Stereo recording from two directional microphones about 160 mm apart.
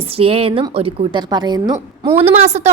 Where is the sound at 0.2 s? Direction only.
35° right (ahead or behind).